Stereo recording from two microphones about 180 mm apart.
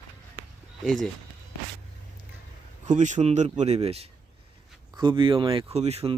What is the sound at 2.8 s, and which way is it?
Speech, 45° right (ahead or behind).